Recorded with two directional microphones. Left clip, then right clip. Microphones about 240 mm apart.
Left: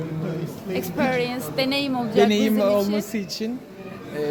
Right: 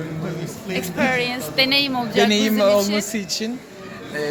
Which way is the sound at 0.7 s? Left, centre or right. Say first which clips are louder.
Right 3 dB; left.